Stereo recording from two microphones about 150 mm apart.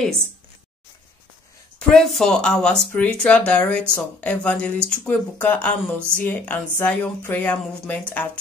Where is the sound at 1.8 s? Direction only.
5° left (ahead or behind).